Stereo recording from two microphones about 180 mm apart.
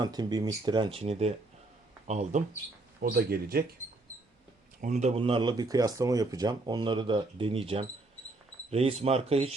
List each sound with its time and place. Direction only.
0.0 s speech: 25° right (ahead or behind); by 2.4 s 40° right (ahead or behind)
3.0 s speech: 55° right (ahead or behind)
4.8 s speech: 40° right (ahead or behind)